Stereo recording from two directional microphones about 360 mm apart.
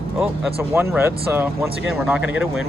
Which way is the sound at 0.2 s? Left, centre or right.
Centre.